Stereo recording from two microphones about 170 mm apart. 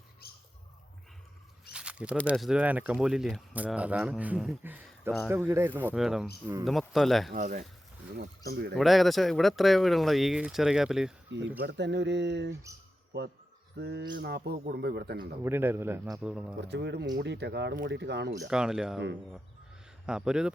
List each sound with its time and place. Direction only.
1.7 s a sound: 5° right (ahead or behind)
2.3 s speech: centre (ahead or behind)
7.3 s speech: 55° right (ahead or behind)
8.4 s speech: 70° right (ahead or behind)
8.7 s speech: centre (ahead or behind)
11.3 s speech: 90° right
12.7 s speech: 20° right (ahead or behind)
13.7 s speech: 75° right (ahead or behind)
15.4 s speech: 15° right (ahead or behind)
16.6 s speech: 85° right
18.5 s speech: 5° right (ahead or behind)
20.1 s speech: 5° right (ahead or behind)